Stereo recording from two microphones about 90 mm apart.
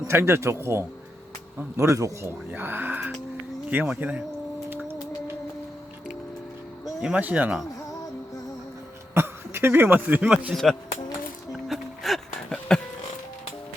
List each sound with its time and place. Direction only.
0.1 s speech: 30° right (ahead or behind)
2.5 s speech: 25° right (ahead or behind)
7.1 s speech: 20° right (ahead or behind)
9.1 s speech: 25° right (ahead or behind)
10.5 s speech: 5° left (ahead or behind)
11.5 s music: centre (ahead or behind)